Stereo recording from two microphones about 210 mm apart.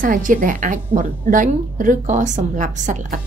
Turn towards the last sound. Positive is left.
turn(degrees=-35)  # may be behind; listen again after turning